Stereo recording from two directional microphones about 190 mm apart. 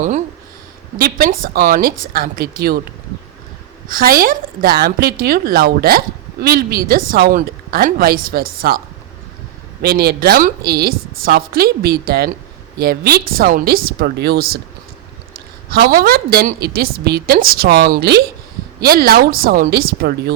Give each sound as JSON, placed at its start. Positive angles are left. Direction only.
{"t": 0.9, "sound": "a woman's voice", "side_deg": -50}
{"t": 3.8, "sound": "a woman's voice", "side_deg": -50}
{"t": 9.8, "sound": "a woman's voice", "side_deg": -55}